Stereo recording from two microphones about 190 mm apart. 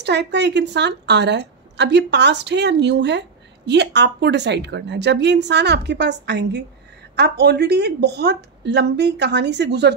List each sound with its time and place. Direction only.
0.0 s a woman's voice: 65° right (ahead or behind)